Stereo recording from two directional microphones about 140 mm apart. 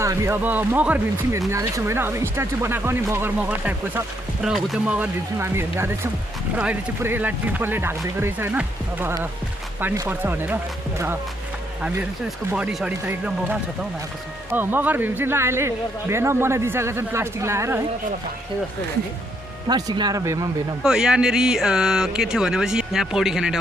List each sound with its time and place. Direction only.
0.0 s a man's voice: 20° right (ahead or behind)
1.4 s a man's voice: 20° right (ahead or behind)
12.5 s a man's voice: 10° right (ahead or behind)
19.6 s speech: 30° right (ahead or behind)
20.8 s speech: 5° right (ahead or behind)